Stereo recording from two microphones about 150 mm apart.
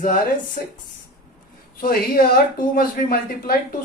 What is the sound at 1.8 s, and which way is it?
Speech, 75° left (ahead or behind).